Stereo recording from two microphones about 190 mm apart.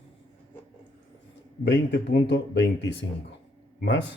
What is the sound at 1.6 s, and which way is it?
Speech, 65° left (ahead or behind).